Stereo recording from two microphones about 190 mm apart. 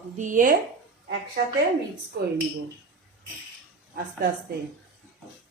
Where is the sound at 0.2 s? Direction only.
45° right (ahead or behind).